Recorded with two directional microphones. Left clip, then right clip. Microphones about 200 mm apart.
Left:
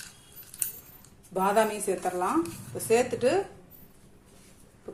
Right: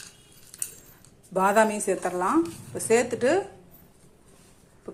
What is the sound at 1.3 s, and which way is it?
A woman's voice, 30° right (ahead or behind).